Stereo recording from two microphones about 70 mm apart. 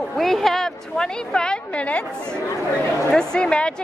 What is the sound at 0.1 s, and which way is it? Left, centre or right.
A woman's voice, centre.